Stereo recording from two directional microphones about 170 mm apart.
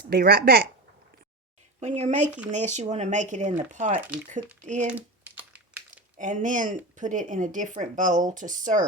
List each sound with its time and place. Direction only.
0.1 s speech: 65° right (ahead or behind)
1.8 s speech: 45° right (ahead or behind)
4.9 s crumpling: 10° right (ahead or behind)
5.9 s speech: 50° right (ahead or behind)